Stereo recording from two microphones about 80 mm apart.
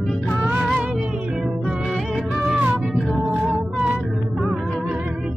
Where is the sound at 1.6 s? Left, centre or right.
Centre.